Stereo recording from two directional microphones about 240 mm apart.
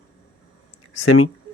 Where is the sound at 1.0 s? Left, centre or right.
Left.